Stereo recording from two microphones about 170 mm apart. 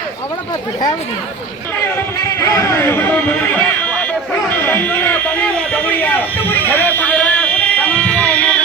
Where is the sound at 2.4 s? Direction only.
15° left (ahead or behind).